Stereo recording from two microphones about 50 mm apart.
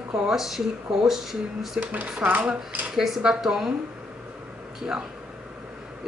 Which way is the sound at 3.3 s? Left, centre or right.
Centre.